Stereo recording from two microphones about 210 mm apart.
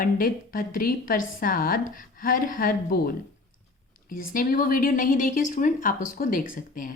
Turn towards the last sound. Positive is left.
turn(degrees=40)  # may be behind; listen again after turning